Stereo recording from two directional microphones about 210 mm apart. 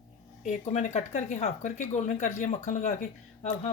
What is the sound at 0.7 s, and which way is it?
Speech, 35° left (ahead or behind).